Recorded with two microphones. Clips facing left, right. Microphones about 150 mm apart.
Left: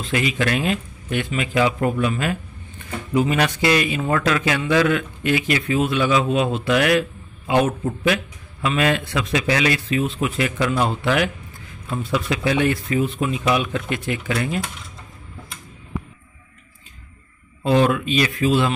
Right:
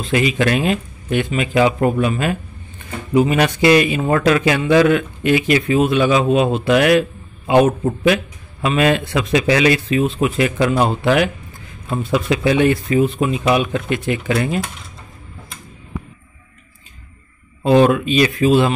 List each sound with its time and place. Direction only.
0.0 s speech: 20° right (ahead or behind)
17.6 s speech: 20° right (ahead or behind)